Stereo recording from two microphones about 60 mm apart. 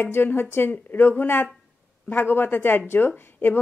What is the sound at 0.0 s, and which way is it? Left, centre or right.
Speech, left.